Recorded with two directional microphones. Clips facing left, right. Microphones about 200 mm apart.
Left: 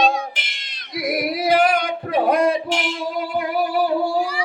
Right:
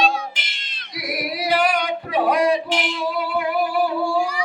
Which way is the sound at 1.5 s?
50° left (ahead or behind).